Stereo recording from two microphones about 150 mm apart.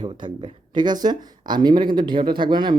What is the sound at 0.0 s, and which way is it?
Speech, 30° right (ahead or behind).